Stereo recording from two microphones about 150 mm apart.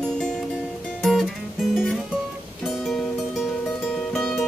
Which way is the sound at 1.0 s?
Centre (ahead or behind).